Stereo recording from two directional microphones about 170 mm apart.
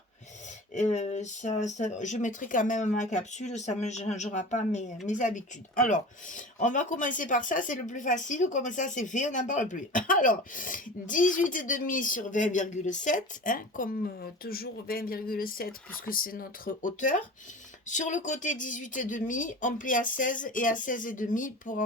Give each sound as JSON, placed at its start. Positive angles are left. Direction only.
{"t": 0.7, "sound": "a woman's voice", "side_deg": 45}